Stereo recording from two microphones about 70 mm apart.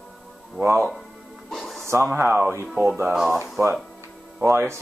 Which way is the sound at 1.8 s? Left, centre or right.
Right.